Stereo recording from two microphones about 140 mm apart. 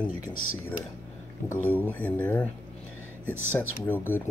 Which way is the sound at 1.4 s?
15° left (ahead or behind).